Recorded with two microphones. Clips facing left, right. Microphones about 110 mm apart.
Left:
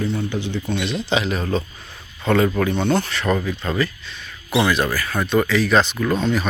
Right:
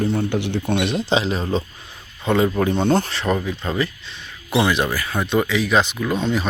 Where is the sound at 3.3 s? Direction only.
15° right (ahead or behind).